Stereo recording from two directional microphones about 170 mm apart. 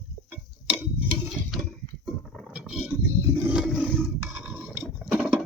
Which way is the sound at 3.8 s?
5° left (ahead or behind).